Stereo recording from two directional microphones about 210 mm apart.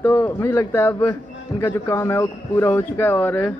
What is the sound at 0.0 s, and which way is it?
A man's voice, 10° left (ahead or behind).